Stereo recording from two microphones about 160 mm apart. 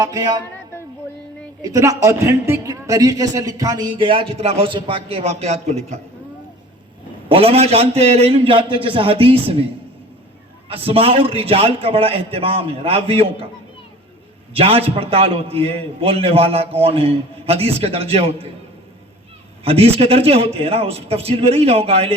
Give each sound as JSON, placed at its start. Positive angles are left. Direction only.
{"t": 0.0, "sound": "speech", "side_deg": -20}
{"t": 1.6, "sound": "a man's voice", "side_deg": -20}
{"t": 7.3, "sound": "a man's voice", "side_deg": -35}
{"t": 10.7, "sound": "a man's voice", "side_deg": -35}
{"t": 14.5, "sound": "a man's voice", "side_deg": -35}
{"t": 19.6, "sound": "a man's voice", "side_deg": -35}